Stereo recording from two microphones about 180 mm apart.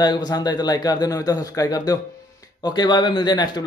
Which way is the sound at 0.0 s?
20° left (ahead or behind).